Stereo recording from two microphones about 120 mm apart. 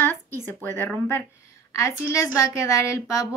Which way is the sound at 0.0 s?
20° left (ahead or behind).